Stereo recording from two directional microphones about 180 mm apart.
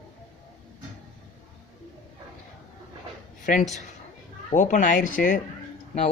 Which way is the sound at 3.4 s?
45° left (ahead or behind).